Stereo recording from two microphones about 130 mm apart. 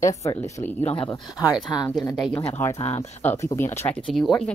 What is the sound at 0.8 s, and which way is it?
Speech, 45° left (ahead or behind).